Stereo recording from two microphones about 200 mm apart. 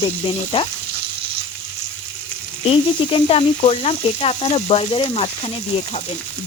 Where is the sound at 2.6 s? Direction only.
25° left (ahead or behind).